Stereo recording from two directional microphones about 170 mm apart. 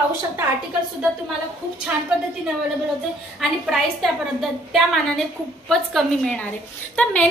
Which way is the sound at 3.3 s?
Centre (ahead or behind).